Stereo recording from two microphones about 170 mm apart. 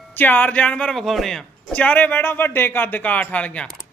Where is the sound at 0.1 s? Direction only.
10° left (ahead or behind).